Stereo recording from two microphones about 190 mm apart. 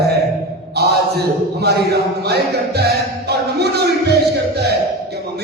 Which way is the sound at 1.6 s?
60° right (ahead or behind).